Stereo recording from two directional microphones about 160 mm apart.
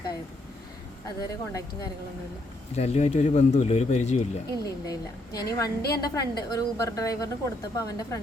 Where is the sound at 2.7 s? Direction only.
45° left (ahead or behind).